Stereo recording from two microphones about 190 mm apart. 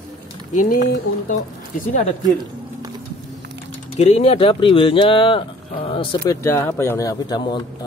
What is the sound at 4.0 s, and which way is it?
Speech, 35° left (ahead or behind).